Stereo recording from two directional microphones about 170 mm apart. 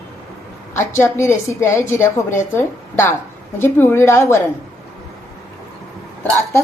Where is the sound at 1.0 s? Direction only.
15° left (ahead or behind).